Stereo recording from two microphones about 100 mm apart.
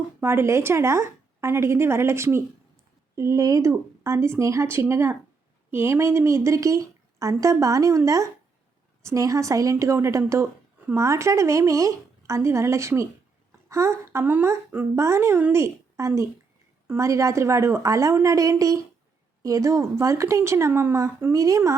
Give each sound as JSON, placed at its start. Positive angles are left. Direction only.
{"t": 0.2, "sound": "a woman's voice", "side_deg": -25}
{"t": 14.3, "sound": "a woman's voice", "side_deg": -15}
{"t": 14.9, "sound": "a woman's voice", "side_deg": -30}